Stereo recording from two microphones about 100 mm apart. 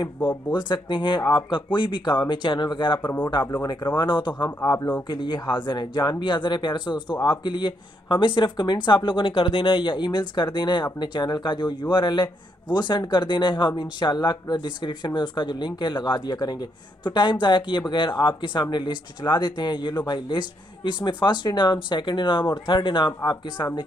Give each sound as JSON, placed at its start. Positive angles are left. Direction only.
{"t": 0.5, "sound": "a man's voice", "side_deg": 50}